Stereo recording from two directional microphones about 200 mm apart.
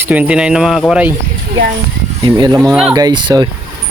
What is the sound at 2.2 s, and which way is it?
Speech, 20° right (ahead or behind).